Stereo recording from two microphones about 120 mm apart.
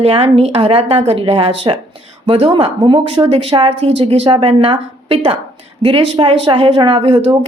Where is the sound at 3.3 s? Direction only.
50° right (ahead or behind).